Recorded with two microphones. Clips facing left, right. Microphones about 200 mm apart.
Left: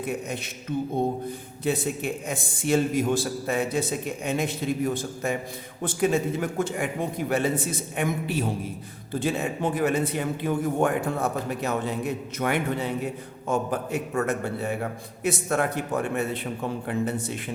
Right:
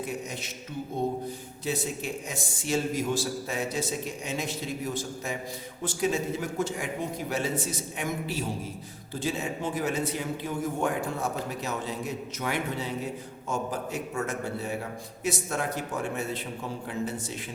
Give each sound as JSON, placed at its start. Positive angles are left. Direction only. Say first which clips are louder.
{"t": 0.1, "sound": "a man's voice", "louder": "left 4 dB", "side_deg": 55}
{"t": 1.6, "sound": "a man's voice", "louder": "left 5 dB", "side_deg": 55}